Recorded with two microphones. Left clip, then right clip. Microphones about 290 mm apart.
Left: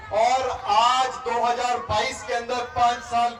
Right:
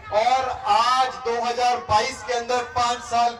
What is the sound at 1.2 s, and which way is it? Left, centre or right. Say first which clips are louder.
Speech: even; right.